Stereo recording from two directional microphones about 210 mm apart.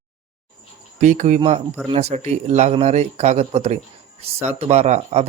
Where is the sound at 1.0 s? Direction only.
35° right (ahead or behind).